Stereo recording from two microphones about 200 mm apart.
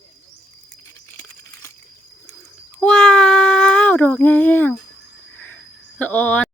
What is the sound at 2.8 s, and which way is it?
Child singing, 5° left (ahead or behind).